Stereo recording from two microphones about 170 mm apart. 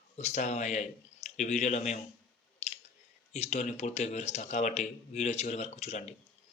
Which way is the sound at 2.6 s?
40° left (ahead or behind).